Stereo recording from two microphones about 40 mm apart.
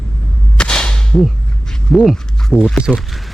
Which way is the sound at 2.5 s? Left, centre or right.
Left.